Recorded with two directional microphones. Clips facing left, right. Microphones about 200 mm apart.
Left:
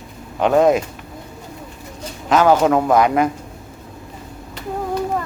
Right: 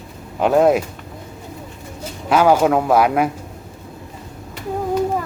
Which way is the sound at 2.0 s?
10° right (ahead or behind).